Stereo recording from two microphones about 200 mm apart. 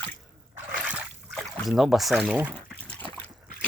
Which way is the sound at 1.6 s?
Centre (ahead or behind).